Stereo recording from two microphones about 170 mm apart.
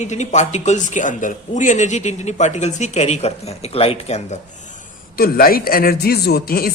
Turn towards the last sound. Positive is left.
turn(degrees=65)  # may be behind; listen again after turning